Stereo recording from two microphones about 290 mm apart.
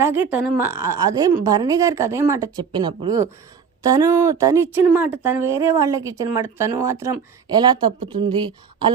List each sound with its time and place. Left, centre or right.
0.0 s speech: centre